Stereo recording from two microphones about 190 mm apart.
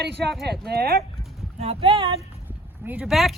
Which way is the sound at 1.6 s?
30° right (ahead or behind).